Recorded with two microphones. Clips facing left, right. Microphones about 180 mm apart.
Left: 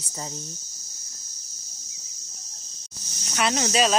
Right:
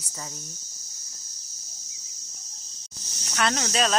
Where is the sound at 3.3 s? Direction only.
10° left (ahead or behind).